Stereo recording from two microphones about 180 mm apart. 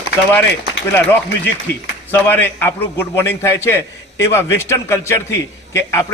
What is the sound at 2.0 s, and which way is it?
A man's voice, 10° left (ahead or behind).